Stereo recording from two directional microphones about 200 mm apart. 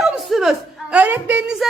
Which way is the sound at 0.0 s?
Centre (ahead or behind).